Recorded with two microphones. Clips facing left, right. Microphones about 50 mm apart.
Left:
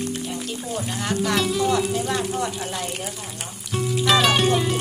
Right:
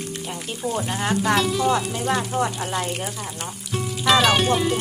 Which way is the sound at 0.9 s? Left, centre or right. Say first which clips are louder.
Right 2 dB; right.